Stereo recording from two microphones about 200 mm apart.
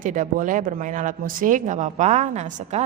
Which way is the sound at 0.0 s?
40° right (ahead or behind).